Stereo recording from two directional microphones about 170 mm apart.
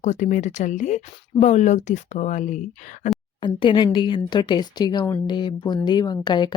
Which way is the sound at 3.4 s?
30° left (ahead or behind).